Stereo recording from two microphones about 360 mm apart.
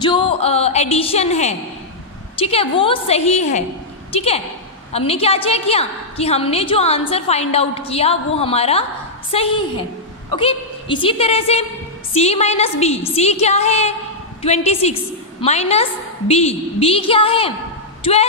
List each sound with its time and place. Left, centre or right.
0.0 s a woman's voice: centre